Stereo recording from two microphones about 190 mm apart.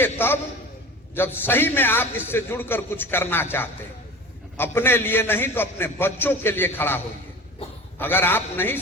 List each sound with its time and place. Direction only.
0.0 s a man's voice: 10° left (ahead or behind)
7.6 s a sound: 30° left (ahead or behind)
7.9 s a man's voice: 10° left (ahead or behind)